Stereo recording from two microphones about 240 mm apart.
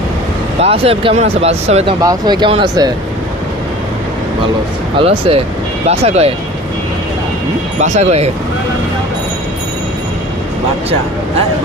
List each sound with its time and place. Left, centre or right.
0.6 s speech: right
4.9 s speech: right
7.8 s speech: right